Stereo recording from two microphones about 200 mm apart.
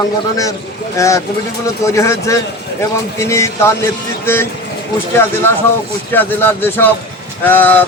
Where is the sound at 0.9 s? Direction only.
15° left (ahead or behind).